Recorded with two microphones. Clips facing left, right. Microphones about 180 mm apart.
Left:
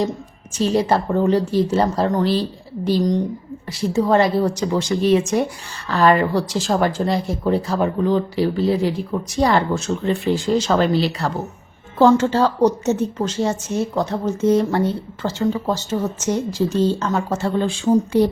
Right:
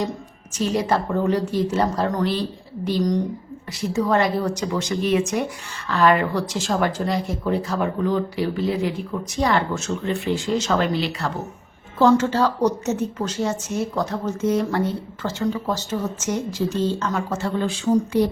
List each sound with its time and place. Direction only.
0.5 s a woman's voice: 30° left (ahead or behind)